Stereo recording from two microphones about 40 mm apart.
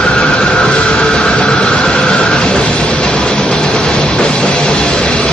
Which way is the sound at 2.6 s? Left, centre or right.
Left.